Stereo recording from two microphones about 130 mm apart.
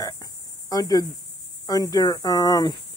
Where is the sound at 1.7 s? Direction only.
30° left (ahead or behind).